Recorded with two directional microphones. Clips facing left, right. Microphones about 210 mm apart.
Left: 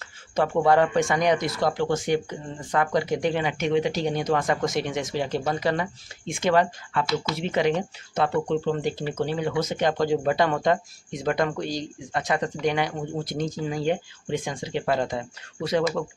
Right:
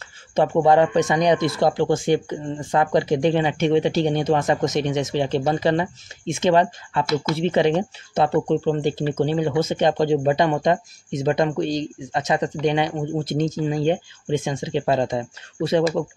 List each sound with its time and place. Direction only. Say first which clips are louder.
0.4 s speech: right 4 dB; 20° right (ahead or behind)